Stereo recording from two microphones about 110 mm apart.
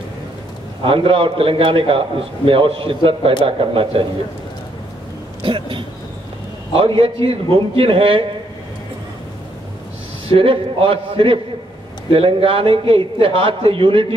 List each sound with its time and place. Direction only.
0.8 s a man's voice: 55° right (ahead or behind)
5.4 s a man's voice: 50° right (ahead or behind)
10.2 s a man's voice: 55° right (ahead or behind)